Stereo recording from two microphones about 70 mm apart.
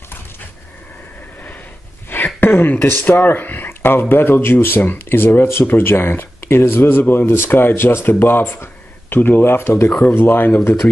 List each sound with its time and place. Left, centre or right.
2.0 s speech: left